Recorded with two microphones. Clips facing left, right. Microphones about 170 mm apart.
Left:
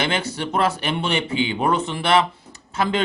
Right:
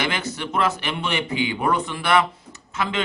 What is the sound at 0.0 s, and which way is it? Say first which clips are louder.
Speech: left 3 dB; 30° left (ahead or behind).